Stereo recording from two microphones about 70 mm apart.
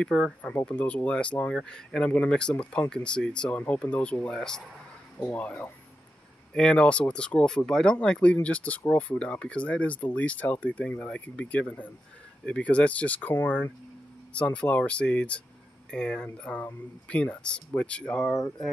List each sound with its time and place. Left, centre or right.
0.0 s speech: centre
5.2 s speech: left